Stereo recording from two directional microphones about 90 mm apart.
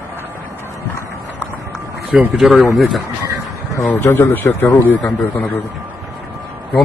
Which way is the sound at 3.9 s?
25° left (ahead or behind).